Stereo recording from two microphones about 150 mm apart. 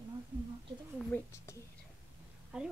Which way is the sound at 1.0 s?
10° left (ahead or behind).